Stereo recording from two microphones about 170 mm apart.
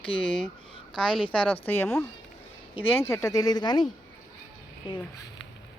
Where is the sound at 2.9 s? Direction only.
15° left (ahead or behind).